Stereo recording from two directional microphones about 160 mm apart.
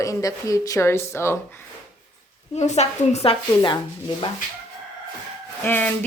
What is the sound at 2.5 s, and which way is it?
Speech, 45° left (ahead or behind).